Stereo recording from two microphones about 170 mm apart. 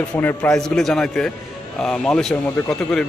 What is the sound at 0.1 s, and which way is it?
A man's voice, 10° left (ahead or behind).